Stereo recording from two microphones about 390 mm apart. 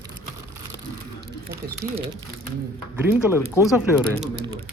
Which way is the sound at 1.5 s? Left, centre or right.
Centre.